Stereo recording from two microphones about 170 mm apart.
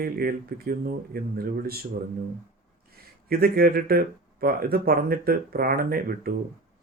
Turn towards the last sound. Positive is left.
turn(degrees=-60)  # may be behind; listen again after turning